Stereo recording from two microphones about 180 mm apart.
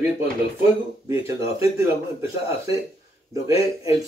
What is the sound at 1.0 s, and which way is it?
Speech, 15° right (ahead or behind).